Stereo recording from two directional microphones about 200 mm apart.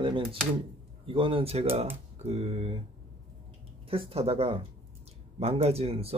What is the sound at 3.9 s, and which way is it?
Speech, 30° right (ahead or behind).